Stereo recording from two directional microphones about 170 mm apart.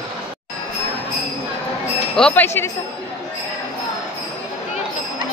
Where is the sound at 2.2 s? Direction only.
5° left (ahead or behind).